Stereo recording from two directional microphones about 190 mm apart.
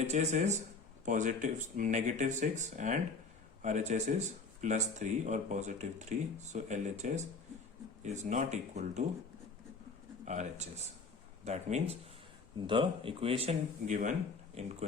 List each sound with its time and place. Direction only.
0.1 s speech: 35° right (ahead or behind)
10.2 s speech: 35° right (ahead or behind)
12.5 s speech: 25° right (ahead or behind)